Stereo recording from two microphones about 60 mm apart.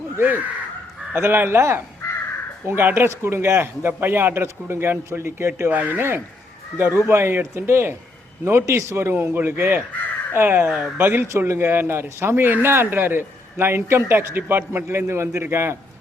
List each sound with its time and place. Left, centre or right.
0.2 s a man's voice: right
5.7 s a man's voice: right
9.9 s crow: left
10.3 s a man's voice: right